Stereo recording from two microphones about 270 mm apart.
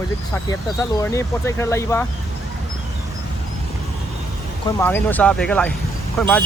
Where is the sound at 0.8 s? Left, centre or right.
Centre.